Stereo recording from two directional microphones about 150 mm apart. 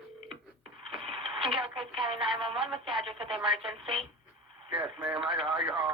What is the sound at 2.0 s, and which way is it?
Telephone, 35° right (ahead or behind).